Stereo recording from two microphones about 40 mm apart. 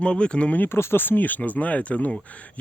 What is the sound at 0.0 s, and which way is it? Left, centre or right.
Speech, left.